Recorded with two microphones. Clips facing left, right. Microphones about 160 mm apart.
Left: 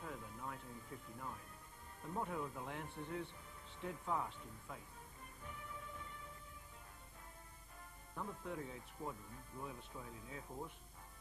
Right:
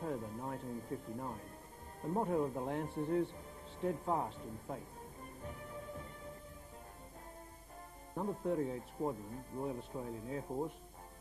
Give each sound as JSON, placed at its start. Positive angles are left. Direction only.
{"t": 0.0, "sound": "speech", "side_deg": -40}
{"t": 5.4, "sound": "music", "side_deg": -40}
{"t": 8.1, "sound": "speech", "side_deg": -40}